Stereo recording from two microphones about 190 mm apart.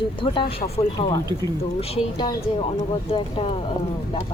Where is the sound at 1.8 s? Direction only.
20° left (ahead or behind).